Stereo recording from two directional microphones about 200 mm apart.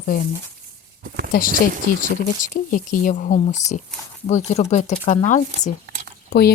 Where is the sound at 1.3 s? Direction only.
45° left (ahead or behind).